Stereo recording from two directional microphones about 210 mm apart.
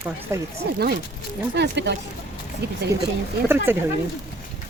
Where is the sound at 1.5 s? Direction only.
55° right (ahead or behind).